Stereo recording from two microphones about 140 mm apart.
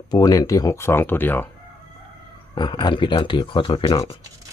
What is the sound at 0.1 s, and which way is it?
Speech, 25° left (ahead or behind).